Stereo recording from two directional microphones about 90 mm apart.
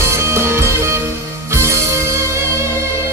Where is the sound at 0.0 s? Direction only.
30° right (ahead or behind).